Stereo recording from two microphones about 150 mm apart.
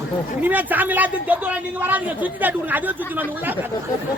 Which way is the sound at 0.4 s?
10° right (ahead or behind).